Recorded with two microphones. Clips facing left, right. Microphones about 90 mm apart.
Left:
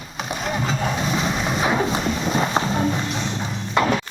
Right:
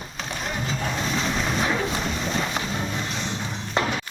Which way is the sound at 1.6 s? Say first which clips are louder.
Left 4 dB; 20° left (ahead or behind).